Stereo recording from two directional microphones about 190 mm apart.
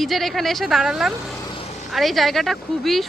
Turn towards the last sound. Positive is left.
turn(degrees=0)  # may be behind; listen again after turning